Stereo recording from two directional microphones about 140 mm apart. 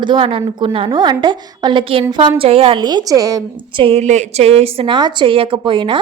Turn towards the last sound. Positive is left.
turn(degrees=-35)  # may be behind; listen again after turning